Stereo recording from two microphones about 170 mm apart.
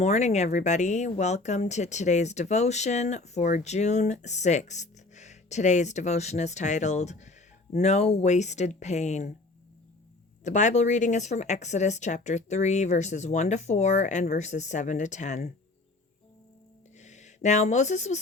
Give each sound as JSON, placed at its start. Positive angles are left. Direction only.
{"t": 0.0, "sound": "speech", "side_deg": 40}
{"t": 10.4, "sound": "speech", "side_deg": 45}
{"t": 17.0, "sound": "speech", "side_deg": 45}